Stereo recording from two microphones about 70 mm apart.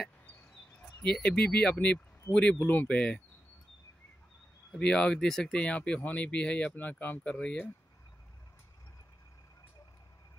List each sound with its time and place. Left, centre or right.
1.0 s speech: centre
4.7 s speech: centre
7.2 s speech: centre